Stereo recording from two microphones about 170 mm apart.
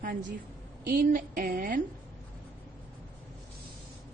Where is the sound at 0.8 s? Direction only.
55° right (ahead or behind).